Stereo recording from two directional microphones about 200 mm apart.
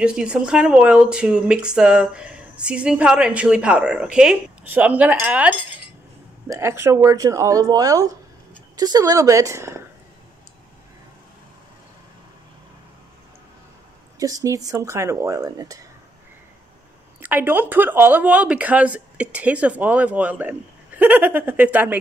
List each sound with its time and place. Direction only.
0.0 s speech: 5° right (ahead or behind)
14.1 s speech: 15° right (ahead or behind)
17.2 s speech: 10° right (ahead or behind)